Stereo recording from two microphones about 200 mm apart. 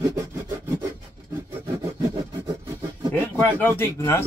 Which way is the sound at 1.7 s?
15° right (ahead or behind).